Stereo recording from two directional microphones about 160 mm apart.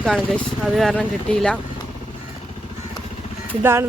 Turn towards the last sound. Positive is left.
turn(degrees=-15)  # may be behind; listen again after turning